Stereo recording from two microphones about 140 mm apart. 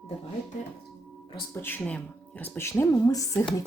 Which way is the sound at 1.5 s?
15° left (ahead or behind).